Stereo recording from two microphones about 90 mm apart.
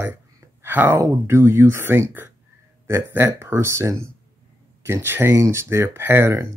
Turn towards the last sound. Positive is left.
turn(degrees=-25)  # may be behind; listen again after turning